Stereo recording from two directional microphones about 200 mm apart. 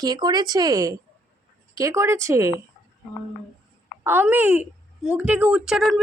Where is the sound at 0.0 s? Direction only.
20° right (ahead or behind).